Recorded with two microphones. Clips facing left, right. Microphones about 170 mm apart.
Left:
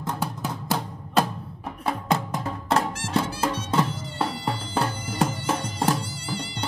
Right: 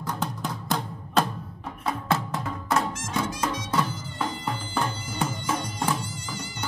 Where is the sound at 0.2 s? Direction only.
10° left (ahead or behind).